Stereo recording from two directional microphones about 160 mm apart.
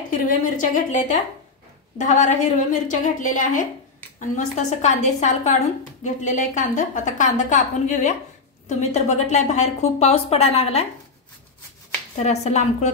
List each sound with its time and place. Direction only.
0.1 s a woman's voice: 55° left (ahead or behind); by 10.9 s 40° left (ahead or behind)
12.2 s a woman's voice: 45° left (ahead or behind)